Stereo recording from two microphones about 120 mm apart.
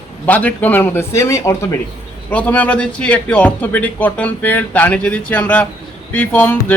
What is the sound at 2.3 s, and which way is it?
Speech, 10° left (ahead or behind).